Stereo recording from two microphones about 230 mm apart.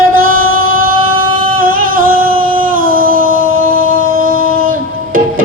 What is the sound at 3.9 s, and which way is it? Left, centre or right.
Music, right.